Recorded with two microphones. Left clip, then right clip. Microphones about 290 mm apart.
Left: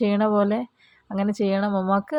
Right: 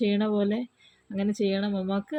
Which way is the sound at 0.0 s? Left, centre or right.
Centre.